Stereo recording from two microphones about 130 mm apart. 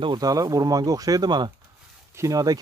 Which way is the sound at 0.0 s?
30° right (ahead or behind).